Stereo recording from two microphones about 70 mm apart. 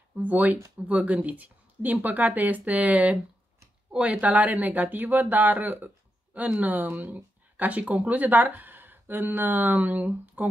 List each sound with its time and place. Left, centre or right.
0.1 s speech: right